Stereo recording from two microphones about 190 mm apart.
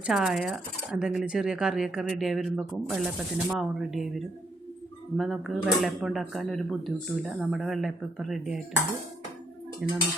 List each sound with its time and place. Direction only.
0.0 s speech: 5° right (ahead or behind)
5.1 s speech: centre (ahead or behind)
9.8 s speech: 5° right (ahead or behind)